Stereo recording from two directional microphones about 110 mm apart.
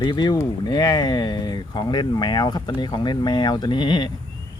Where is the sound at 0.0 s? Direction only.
40° left (ahead or behind).